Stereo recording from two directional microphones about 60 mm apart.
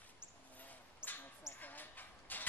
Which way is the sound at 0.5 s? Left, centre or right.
Left.